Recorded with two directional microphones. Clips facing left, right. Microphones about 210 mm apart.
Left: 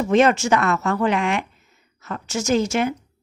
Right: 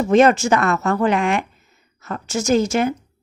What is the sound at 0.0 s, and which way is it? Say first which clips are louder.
Speech: right 3 dB; 45° right (ahead or behind).